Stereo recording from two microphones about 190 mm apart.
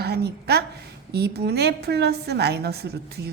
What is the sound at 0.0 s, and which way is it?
A woman's voice, 55° right (ahead or behind).